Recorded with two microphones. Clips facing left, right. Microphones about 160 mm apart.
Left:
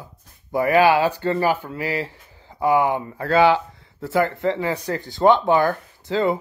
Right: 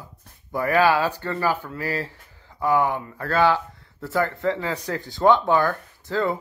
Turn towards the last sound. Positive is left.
turn(degrees=20)  # may be behind; listen again after turning